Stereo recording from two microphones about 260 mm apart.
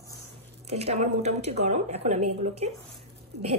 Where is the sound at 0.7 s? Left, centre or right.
Right.